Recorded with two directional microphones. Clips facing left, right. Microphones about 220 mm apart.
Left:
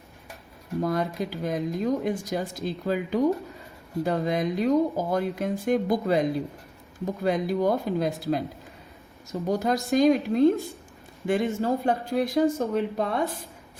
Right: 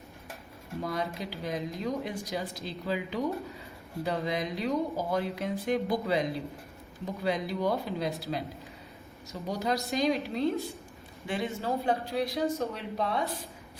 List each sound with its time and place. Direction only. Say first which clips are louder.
0.8 s speech: left 7 dB; 50° left (ahead or behind)
9.5 s speech: left 6 dB; 50° left (ahead or behind)